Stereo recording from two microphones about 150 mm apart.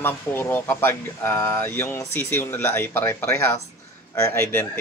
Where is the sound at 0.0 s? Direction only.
15° left (ahead or behind).